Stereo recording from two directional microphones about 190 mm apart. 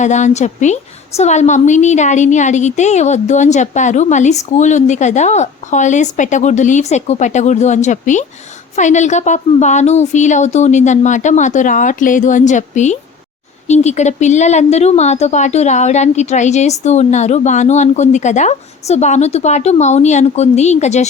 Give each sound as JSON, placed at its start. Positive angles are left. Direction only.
{"t": 0.0, "sound": "a woman's voice", "side_deg": 40}